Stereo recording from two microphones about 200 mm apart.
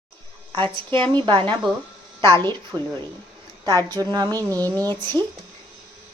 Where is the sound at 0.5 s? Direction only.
25° right (ahead or behind).